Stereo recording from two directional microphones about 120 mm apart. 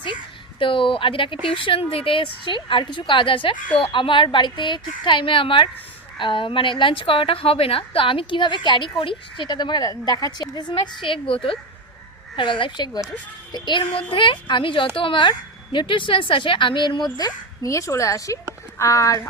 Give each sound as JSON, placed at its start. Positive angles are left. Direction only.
{"t": 0.6, "sound": "a woman's voice", "side_deg": 45}
{"t": 12.4, "sound": "a woman's voice", "side_deg": 45}